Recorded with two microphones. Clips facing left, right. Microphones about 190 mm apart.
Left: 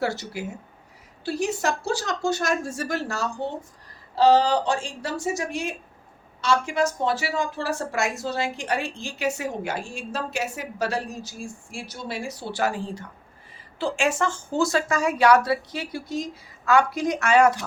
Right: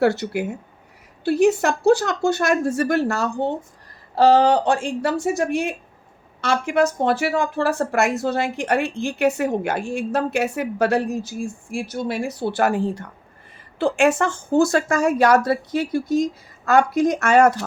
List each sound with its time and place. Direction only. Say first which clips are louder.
0.0 s speech: right 8 dB; 60° right (ahead or behind)